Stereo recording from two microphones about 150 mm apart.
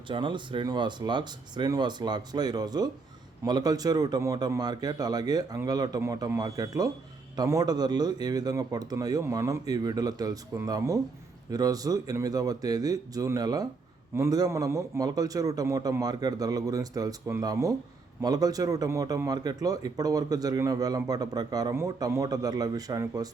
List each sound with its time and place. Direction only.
0.1 s a man's voice: 30° right (ahead or behind)